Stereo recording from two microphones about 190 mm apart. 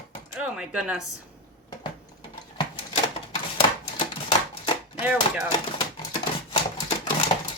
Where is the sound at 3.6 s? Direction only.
30° left (ahead or behind).